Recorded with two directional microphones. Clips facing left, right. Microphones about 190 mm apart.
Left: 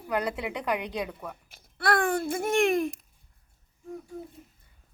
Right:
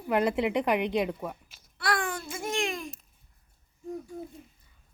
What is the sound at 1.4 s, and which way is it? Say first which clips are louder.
Babbling: left 6 dB; 55° left (ahead or behind).